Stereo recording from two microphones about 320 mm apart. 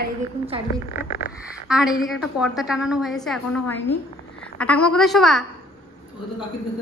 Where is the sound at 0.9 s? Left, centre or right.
Left.